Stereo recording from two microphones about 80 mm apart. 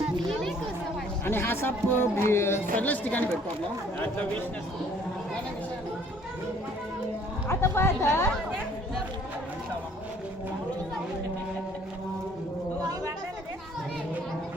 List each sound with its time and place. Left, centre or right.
1.2 s speech: left
2.7 s speech: centre
7.4 s speech: left